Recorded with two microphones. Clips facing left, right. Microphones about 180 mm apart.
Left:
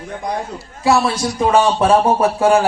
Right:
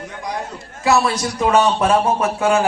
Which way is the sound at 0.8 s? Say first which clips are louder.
Left 1 dB; 30° left (ahead or behind).